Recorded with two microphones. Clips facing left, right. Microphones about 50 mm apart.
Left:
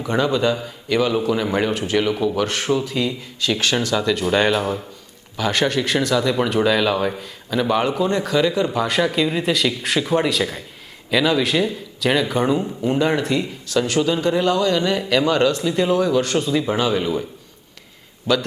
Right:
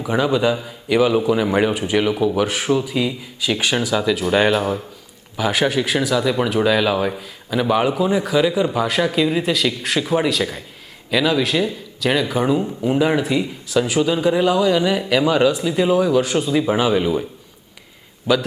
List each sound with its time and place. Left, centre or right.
0.0 s a man's voice: centre
18.3 s a man's voice: centre